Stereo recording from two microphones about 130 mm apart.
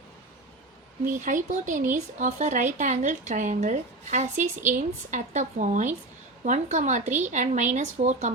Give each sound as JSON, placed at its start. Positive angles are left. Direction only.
{"t": 1.0, "sound": "speech", "side_deg": -85}